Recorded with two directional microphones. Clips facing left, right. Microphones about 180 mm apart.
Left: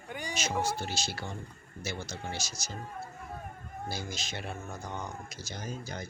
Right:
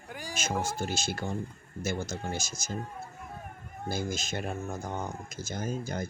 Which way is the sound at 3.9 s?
50° right (ahead or behind).